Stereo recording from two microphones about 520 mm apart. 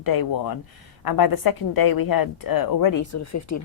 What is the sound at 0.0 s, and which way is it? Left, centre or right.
Speech, left.